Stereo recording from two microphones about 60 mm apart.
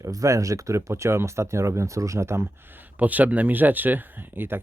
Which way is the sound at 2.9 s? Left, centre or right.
Right.